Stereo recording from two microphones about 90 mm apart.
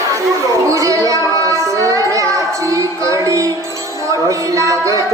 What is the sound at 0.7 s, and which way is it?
Music, 35° right (ahead or behind).